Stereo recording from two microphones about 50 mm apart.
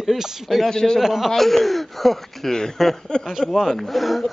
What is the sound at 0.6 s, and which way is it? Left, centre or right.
Speech, centre.